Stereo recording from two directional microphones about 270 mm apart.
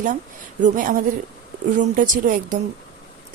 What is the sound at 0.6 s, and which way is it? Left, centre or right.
Speech, right.